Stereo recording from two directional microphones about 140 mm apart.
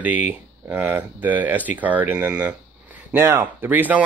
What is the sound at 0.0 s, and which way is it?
Speech, 10° right (ahead or behind).